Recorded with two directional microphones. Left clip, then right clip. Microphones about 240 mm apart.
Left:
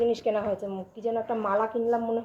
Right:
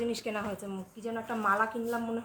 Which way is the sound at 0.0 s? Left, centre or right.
Right.